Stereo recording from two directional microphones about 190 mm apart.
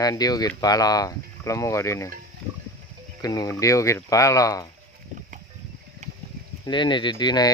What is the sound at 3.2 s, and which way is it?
Speech, 20° left (ahead or behind).